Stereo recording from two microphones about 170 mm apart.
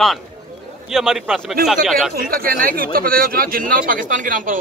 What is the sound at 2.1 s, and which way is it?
A man's voice, 60° right (ahead or behind).